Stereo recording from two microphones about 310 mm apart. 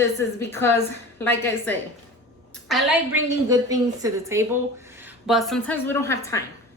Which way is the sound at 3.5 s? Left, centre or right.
Centre.